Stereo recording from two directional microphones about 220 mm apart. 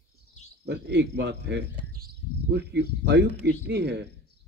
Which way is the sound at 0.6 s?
50° right (ahead or behind).